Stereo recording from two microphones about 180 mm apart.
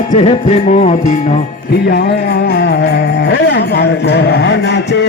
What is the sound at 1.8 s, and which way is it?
Music, 60° left (ahead or behind).